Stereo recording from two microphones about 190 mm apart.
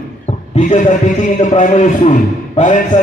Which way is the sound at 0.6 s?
40° left (ahead or behind).